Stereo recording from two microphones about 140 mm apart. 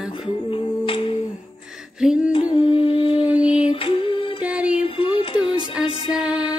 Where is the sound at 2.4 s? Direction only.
40° left (ahead or behind).